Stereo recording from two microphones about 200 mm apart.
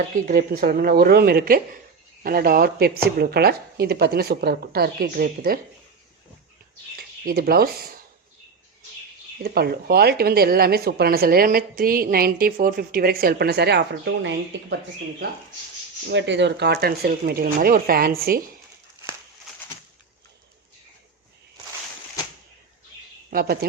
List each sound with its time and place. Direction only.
0.3 s a woman's voice: 45° right (ahead or behind)
6.9 s speech: 50° right (ahead or behind)
9.4 s a woman's voice: 50° right (ahead or behind)
16.0 s a woman's voice: 65° right (ahead or behind)
23.3 s a woman's voice: 50° right (ahead or behind)